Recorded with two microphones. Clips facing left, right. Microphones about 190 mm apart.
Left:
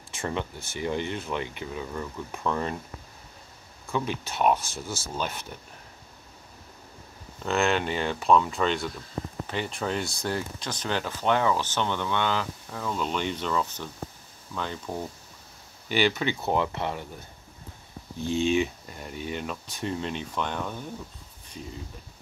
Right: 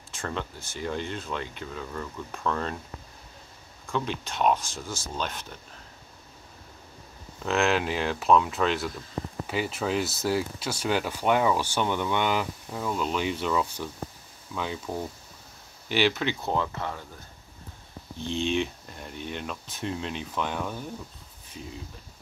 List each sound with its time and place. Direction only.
0.1 s speech: 10° left (ahead or behind)
3.8 s speech: 10° left (ahead or behind)
7.4 s speech: centre (ahead or behind)
16.4 s speech: 15° left (ahead or behind)
18.2 s speech: 5° left (ahead or behind)